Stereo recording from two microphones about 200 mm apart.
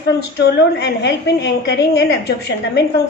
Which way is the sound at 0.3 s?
55° left (ahead or behind).